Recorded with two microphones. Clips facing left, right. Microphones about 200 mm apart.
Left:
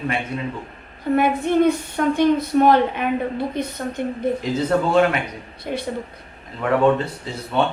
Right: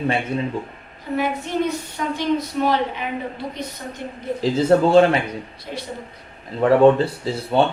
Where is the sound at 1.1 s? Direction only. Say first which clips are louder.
Left 5 dB; 55° left (ahead or behind).